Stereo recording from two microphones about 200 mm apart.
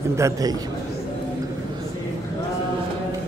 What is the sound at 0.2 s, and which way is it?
Speech, 20° right (ahead or behind).